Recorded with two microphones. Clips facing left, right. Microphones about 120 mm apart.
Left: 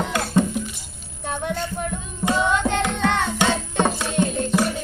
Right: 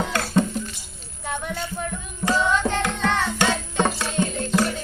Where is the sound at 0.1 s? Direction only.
15° left (ahead or behind).